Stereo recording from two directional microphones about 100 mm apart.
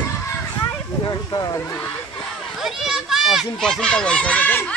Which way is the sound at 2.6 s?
5° right (ahead or behind).